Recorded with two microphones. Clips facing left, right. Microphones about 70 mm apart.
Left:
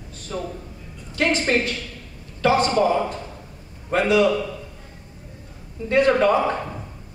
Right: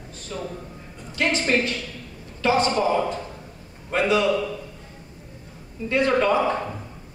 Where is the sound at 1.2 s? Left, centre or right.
Left.